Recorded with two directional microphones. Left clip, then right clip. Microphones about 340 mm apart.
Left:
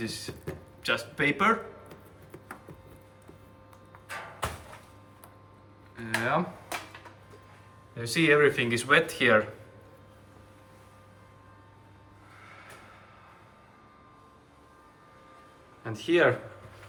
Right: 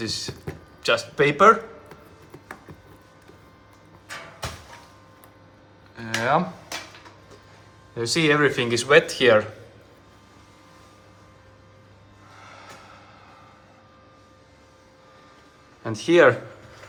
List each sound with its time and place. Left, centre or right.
0.0 s speech: centre
6.0 s speech: centre
7.9 s speech: centre
15.8 s speech: centre